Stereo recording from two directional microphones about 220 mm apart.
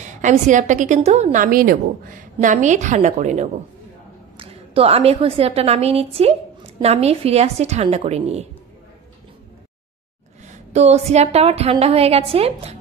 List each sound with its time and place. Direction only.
0.0 s a woman's voice: 35° right (ahead or behind)
10.4 s a woman's voice: 30° right (ahead or behind)